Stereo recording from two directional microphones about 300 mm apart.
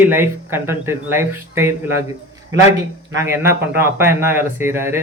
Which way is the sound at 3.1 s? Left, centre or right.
Centre.